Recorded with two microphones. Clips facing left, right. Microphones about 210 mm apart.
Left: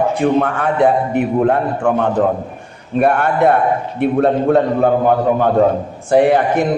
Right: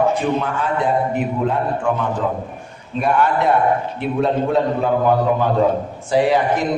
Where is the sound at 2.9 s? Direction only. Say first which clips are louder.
Left 3 dB; 60° left (ahead or behind).